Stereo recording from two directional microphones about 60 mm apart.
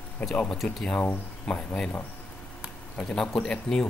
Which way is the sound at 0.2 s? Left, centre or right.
Left.